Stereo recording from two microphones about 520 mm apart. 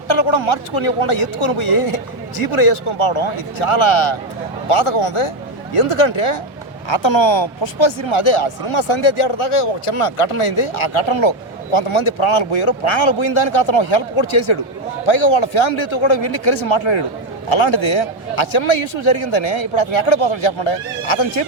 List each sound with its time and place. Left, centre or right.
0.1 s speech: left